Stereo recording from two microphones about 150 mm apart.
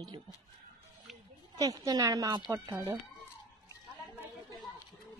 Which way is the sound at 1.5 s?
25° right (ahead or behind).